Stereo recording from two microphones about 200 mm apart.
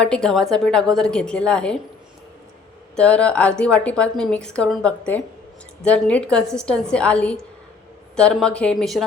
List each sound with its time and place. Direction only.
0.0 s a woman's voice: 5° left (ahead or behind)
2.9 s a woman's voice: 5° left (ahead or behind)